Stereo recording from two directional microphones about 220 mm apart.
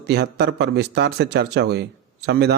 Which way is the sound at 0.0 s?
50° right (ahead or behind).